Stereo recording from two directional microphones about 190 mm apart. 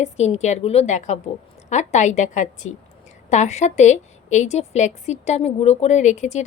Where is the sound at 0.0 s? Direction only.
35° left (ahead or behind).